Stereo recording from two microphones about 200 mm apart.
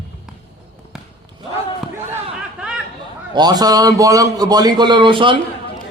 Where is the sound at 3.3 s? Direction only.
20° right (ahead or behind).